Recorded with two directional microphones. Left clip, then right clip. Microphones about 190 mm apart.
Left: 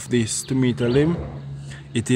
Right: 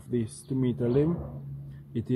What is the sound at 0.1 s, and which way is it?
Speech, 10° left (ahead or behind).